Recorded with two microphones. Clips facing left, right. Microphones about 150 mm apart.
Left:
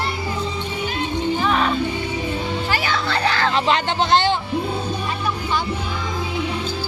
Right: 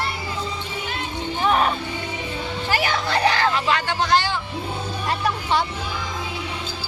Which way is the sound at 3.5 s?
25° left (ahead or behind).